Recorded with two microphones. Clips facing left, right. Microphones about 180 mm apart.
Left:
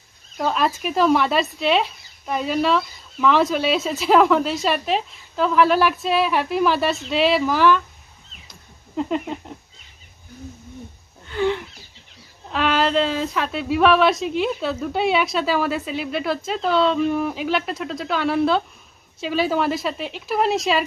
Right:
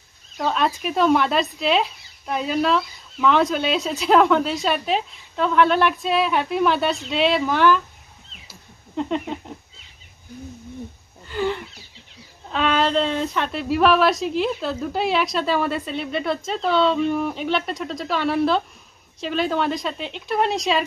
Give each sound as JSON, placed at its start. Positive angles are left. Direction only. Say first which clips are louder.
{"t": 0.4, "sound": "speech", "louder": "left 1 dB", "side_deg": 0}
{"t": 8.5, "sound": "a sound", "louder": "right 1 dB", "side_deg": 0}
{"t": 11.2, "sound": "speech", "louder": "left 2 dB", "side_deg": 0}